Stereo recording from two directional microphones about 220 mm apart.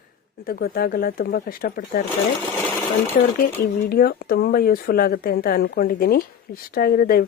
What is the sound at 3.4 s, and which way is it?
Speech, 45° left (ahead or behind).